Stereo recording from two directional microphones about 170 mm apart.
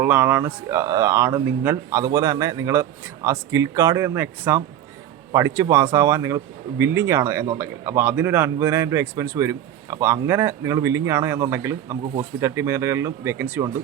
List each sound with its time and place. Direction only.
0.0 s speech: 15° right (ahead or behind)